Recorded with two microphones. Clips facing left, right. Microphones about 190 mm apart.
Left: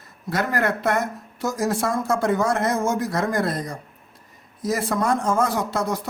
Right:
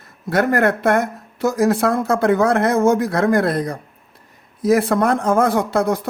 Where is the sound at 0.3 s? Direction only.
55° right (ahead or behind).